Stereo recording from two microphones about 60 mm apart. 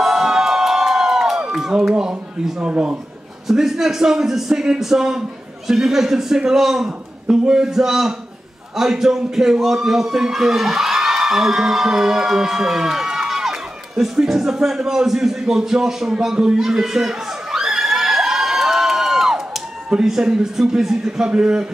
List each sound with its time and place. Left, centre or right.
0.0 s crowd: centre
2.7 s speech: centre
3.4 s a man's voice: centre